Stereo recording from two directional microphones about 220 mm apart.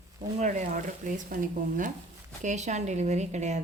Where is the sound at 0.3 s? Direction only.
35° right (ahead or behind).